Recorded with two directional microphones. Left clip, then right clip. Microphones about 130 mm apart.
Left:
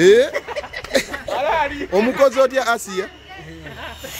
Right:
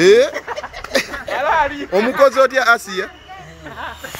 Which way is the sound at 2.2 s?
20° left (ahead or behind).